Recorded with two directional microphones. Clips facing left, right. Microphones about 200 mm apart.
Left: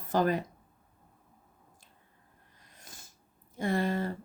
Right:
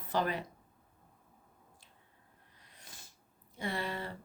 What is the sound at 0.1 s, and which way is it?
Speech, 45° left (ahead or behind).